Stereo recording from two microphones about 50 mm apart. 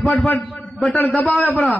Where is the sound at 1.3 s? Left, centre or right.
Left.